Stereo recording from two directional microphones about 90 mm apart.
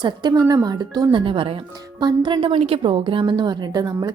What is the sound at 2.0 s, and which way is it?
A woman's voice, 65° right (ahead or behind).